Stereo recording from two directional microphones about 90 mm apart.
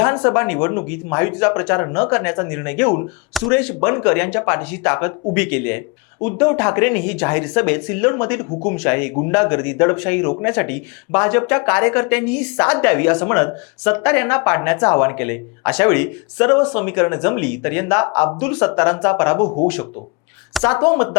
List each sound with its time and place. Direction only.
0.0 s speech: 20° left (ahead or behind)
20.7 s speech: 25° left (ahead or behind)